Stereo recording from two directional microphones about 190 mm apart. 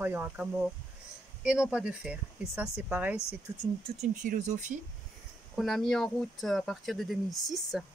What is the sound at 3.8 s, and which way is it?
Speech, 35° right (ahead or behind).